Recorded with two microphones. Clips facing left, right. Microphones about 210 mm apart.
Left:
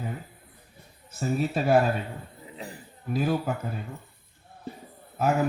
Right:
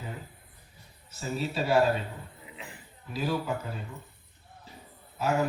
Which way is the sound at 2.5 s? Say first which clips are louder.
Left 9 dB; 35° left (ahead or behind).